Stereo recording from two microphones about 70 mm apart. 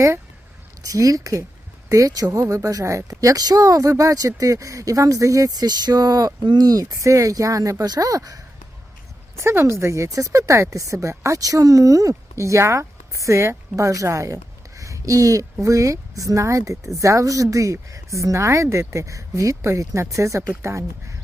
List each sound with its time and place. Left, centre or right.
0.9 s a woman's voice: right
9.4 s a woman's voice: right
14.8 s a sound: right
15.6 s a woman's voice: right